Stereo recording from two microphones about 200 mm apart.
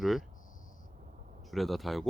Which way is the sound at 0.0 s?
Centre (ahead or behind).